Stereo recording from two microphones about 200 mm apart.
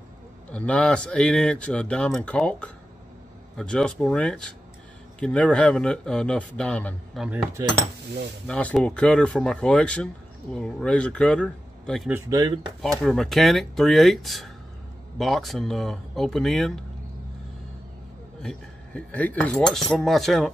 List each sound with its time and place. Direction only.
0.5 s speech: 5° left (ahead or behind)
7.2 s speech: 15° right (ahead or behind)
8.5 s speech: 5° left (ahead or behind)
12.1 s speech: 15° right (ahead or behind)
13.0 s speech: centre (ahead or behind)
18.4 s speech: 5° left (ahead or behind)